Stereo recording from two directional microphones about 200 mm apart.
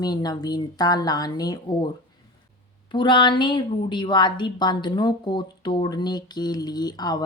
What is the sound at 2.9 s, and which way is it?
Speech, 25° left (ahead or behind).